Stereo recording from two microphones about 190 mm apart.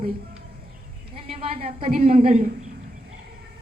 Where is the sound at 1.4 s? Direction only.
30° right (ahead or behind).